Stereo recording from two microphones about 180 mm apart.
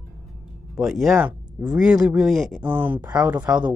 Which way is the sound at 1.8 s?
5° right (ahead or behind).